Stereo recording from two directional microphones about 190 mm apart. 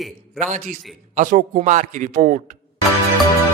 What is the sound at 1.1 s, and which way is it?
A man's voice, 45° right (ahead or behind).